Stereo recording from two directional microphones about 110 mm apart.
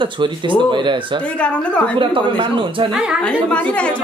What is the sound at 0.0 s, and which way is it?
Speech, 45° right (ahead or behind).